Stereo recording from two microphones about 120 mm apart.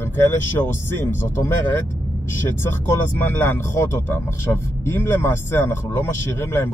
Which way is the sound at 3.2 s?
20° left (ahead or behind).